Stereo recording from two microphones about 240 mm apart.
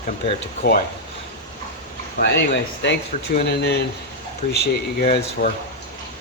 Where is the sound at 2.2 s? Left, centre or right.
Left.